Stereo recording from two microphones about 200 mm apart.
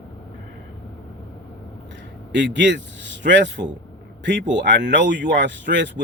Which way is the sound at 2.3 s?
60° right (ahead or behind).